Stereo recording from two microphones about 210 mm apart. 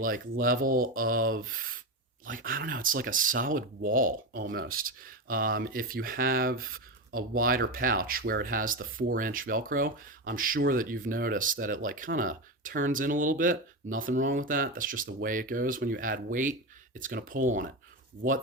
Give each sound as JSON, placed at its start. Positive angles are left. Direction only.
{"t": 0.0, "sound": "speech", "side_deg": -40}